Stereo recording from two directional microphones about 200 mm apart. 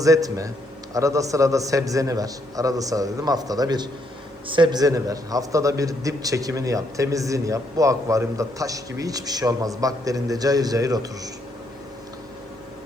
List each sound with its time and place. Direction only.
0.0 s a man's voice: 15° right (ahead or behind)